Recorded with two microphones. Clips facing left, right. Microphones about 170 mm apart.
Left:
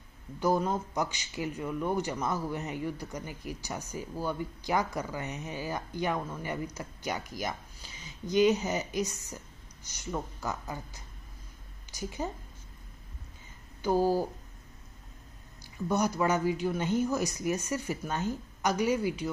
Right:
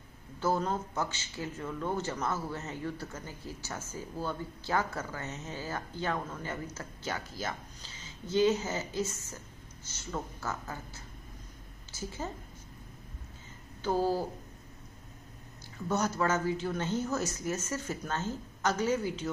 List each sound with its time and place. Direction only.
0.4 s a man's voice: 15° left (ahead or behind)
13.8 s a man's voice: 15° left (ahead or behind)
15.9 s a man's voice: 15° left (ahead or behind)